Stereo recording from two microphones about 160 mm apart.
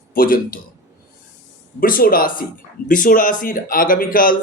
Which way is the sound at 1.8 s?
65° left (ahead or behind).